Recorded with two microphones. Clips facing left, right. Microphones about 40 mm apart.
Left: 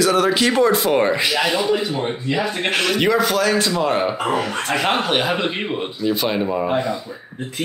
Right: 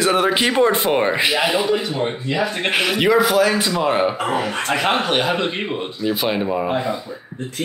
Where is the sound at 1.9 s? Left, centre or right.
Centre.